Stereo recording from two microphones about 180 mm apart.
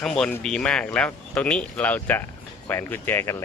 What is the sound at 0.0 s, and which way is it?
Speech, 5° left (ahead or behind).